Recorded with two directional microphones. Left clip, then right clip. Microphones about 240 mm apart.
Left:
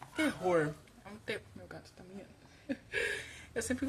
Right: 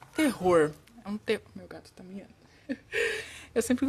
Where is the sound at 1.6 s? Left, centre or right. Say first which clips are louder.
Right 4 dB; right.